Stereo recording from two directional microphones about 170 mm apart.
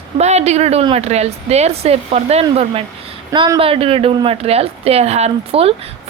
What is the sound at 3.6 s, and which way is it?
A woman's voice, 35° right (ahead or behind).